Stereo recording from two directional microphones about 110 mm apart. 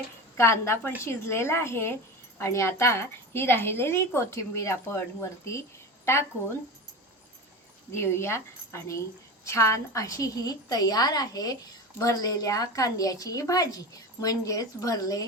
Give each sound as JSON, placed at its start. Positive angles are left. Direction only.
{"t": 0.3, "sound": "a woman's voice", "side_deg": 25}
{"t": 7.9, "sound": "a woman's voice", "side_deg": 25}